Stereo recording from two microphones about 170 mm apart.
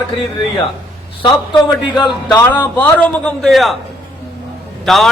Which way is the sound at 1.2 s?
25° left (ahead or behind).